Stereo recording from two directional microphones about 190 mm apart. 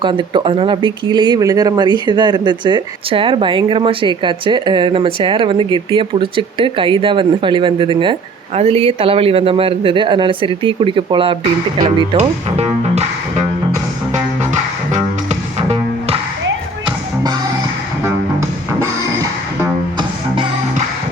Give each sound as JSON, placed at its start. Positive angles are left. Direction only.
{"t": 0.0, "sound": "speech", "side_deg": -25}
{"t": 12.6, "sound": "music", "side_deg": -35}
{"t": 14.1, "sound": "music", "side_deg": -40}
{"t": 18.0, "sound": "music", "side_deg": -15}